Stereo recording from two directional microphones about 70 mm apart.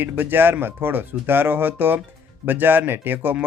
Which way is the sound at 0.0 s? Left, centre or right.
Right.